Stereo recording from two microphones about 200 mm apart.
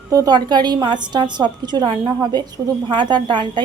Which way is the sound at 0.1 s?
20° right (ahead or behind).